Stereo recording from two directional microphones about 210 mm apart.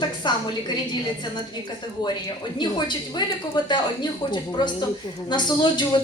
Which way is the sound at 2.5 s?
20° left (ahead or behind).